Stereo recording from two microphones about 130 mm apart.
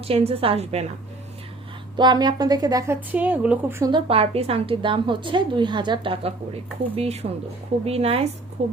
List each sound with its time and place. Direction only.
0.0 s a woman's voice: 50° right (ahead or behind)
2.0 s a woman's voice: 35° right (ahead or behind); by 3.8 s 10° right (ahead or behind)
3.9 s a woman's voice: 50° right (ahead or behind)